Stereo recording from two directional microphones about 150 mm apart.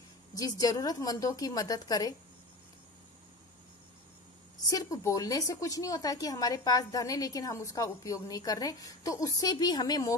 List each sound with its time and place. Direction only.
0.3 s a woman's voice: 25° left (ahead or behind)
4.6 s a woman's voice: 25° left (ahead or behind)